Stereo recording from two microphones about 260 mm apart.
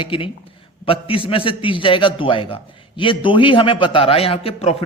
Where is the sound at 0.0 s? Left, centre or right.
Centre.